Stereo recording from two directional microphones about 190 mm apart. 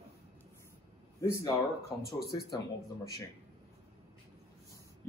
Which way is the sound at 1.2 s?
15° left (ahead or behind).